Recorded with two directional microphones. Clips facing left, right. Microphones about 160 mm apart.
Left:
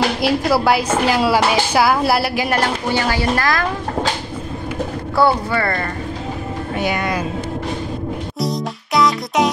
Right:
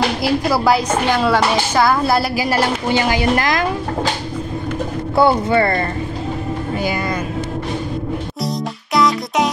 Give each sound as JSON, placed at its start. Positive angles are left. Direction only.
{"t": 0.2, "sound": "speech", "side_deg": 0}
{"t": 2.9, "sound": "a woman's voice", "side_deg": -15}
{"t": 5.1, "sound": "speech", "side_deg": -20}
{"t": 6.8, "sound": "speech", "side_deg": 0}
{"t": 8.9, "sound": "music", "side_deg": 0}